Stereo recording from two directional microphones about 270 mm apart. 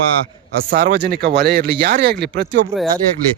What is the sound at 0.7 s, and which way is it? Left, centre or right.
Speech, right.